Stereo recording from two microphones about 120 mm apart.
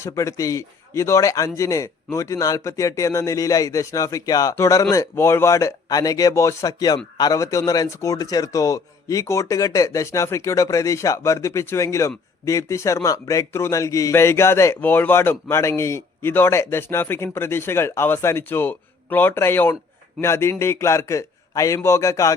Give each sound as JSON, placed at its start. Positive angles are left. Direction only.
{"t": 0.0, "sound": "a man's voice", "side_deg": 25}